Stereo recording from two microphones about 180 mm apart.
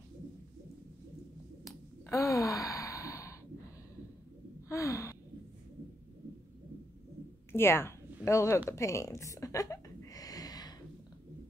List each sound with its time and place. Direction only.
1.6 s sigh: 15° left (ahead or behind)
4.6 s sigh: 15° left (ahead or behind)
7.5 s a woman's voice: 15° left (ahead or behind)
8.6 s a sound: 15° left (ahead or behind)